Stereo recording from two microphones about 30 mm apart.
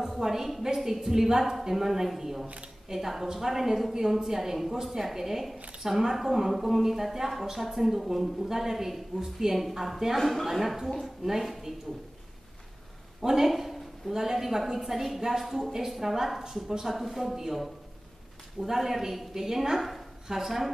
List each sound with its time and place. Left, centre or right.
0.0 s a woman's voice: centre
9.6 s a woman's voice: centre
10.1 s speech: centre
13.2 s a woman's voice: centre
13.5 s a sound: centre
14.1 s a woman's voice: centre